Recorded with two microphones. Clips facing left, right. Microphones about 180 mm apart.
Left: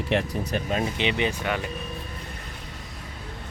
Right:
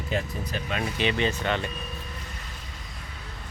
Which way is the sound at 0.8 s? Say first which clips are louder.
Left 1 dB; 20° left (ahead or behind).